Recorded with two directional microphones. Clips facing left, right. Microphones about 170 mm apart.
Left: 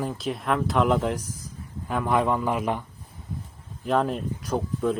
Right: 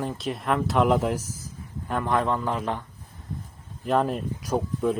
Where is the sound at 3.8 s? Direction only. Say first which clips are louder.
Even; centre (ahead or behind).